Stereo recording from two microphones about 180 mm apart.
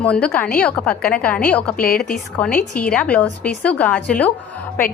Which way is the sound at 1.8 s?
55° left (ahead or behind).